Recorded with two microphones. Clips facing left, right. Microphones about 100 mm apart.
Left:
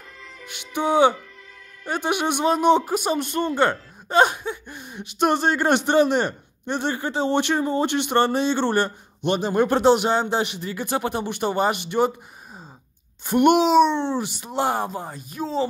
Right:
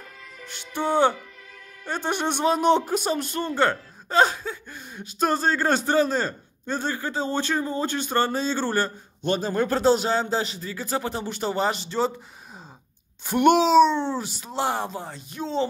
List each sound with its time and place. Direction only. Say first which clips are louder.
0.5 s a man's voice: left 3 dB; 15° left (ahead or behind)
13.3 s speech: left 1 dB; 50° left (ahead or behind)
13.8 s a man's voice: left 1 dB; 20° left (ahead or behind)